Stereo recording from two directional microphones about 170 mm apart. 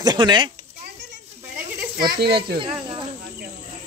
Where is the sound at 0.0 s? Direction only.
25° right (ahead or behind).